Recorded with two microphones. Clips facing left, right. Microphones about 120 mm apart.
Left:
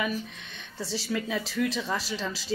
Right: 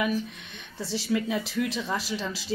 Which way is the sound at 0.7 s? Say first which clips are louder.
Right 3 dB; 15° right (ahead or behind).